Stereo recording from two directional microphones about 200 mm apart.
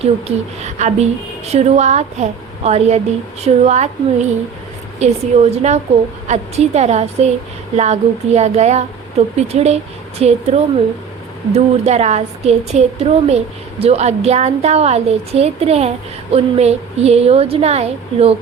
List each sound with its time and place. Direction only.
0.0 s a woman's voice: 35° right (ahead or behind)
4.9 s a woman's voice: 35° right (ahead or behind)